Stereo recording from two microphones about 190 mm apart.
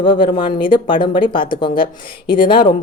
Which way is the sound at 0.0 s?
25° left (ahead or behind).